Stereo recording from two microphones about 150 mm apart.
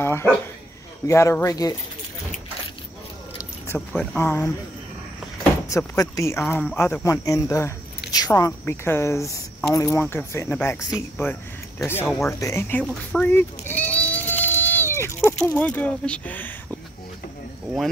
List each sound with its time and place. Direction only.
0.0 s a woman's voice: 15° left (ahead or behind)
3.6 s speech: 15° left (ahead or behind)
5.7 s a woman's voice: 20° left (ahead or behind)
13.2 s sheep: 15° left (ahead or behind)
14.4 s a sound: 15° left (ahead or behind)
15.4 s speech: 10° left (ahead or behind)